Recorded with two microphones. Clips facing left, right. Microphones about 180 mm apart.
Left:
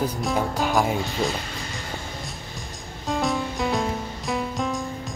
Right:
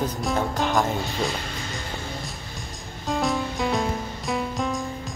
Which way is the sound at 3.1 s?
Centre (ahead or behind).